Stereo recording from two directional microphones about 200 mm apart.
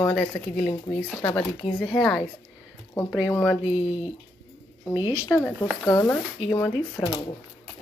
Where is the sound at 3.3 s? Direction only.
5° left (ahead or behind).